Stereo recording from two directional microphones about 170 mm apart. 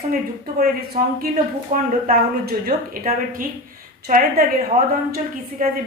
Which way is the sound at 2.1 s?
60° right (ahead or behind).